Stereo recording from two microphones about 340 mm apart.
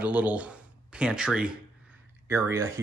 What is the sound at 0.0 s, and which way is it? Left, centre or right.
Speech, centre.